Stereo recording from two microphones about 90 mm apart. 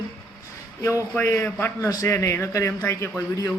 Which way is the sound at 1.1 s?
25° left (ahead or behind).